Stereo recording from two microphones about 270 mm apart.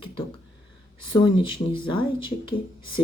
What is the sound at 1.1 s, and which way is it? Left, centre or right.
Speech, centre.